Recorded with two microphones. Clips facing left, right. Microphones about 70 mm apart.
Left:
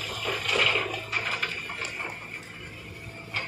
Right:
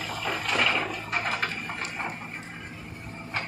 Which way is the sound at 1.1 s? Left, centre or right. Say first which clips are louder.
Right 2 dB; right.